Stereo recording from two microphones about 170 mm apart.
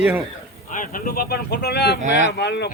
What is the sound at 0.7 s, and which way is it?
Speech, 50° left (ahead or behind).